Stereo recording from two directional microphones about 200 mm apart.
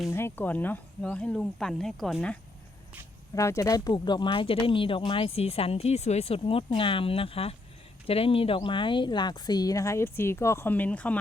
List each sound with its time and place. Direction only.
0.1 s speech: 10° left (ahead or behind)
3.3 s speech: 15° left (ahead or behind)